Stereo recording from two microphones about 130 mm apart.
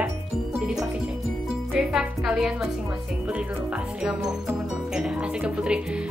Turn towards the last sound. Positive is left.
turn(degrees=-5)  # may be behind; listen again after turning